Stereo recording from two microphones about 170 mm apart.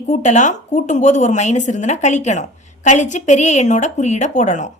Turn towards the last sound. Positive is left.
turn(degrees=45)  # may be behind; listen again after turning